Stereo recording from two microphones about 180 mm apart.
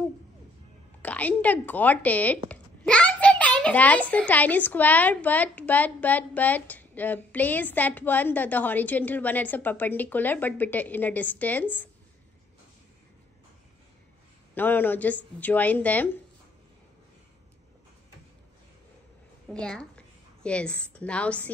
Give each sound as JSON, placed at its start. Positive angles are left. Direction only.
{"t": 1.0, "sound": "speech", "side_deg": 10}
{"t": 14.5, "sound": "speech", "side_deg": 10}
{"t": 19.5, "sound": "a woman's voice", "side_deg": 5}